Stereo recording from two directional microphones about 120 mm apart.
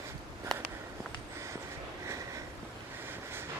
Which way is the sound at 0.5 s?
5° left (ahead or behind).